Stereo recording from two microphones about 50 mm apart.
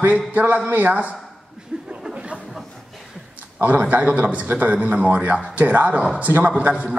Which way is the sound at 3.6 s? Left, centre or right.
Right.